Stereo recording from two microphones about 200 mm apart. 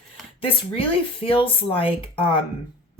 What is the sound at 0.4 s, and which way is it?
Speech, 25° left (ahead or behind).